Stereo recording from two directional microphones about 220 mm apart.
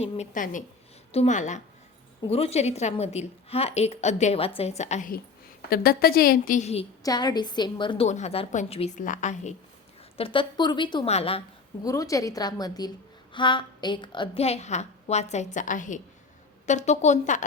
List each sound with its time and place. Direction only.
0.0 s a woman's voice: 35° left (ahead or behind)
7.0 s a woman's voice: 15° left (ahead or behind)
11.9 s a woman's voice: 15° left (ahead or behind); by 17.4 s 35° left (ahead or behind)